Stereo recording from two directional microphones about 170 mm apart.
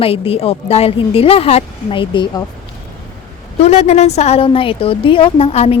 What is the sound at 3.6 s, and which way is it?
A woman's voice, 40° left (ahead or behind).